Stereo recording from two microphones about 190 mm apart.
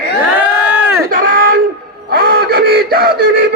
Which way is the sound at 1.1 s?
50° right (ahead or behind).